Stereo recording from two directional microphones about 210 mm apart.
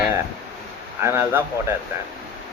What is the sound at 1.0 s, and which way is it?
Speech, 10° right (ahead or behind).